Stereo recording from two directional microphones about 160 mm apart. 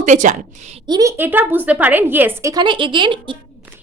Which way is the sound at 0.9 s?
20° right (ahead or behind).